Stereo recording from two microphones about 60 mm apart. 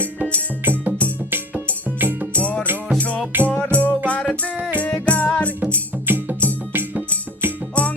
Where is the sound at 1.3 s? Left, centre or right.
Right.